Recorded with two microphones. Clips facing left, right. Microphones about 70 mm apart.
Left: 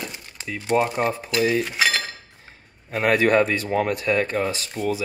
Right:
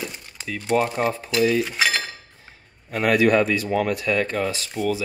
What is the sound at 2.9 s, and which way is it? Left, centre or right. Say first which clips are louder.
Speech: even; left.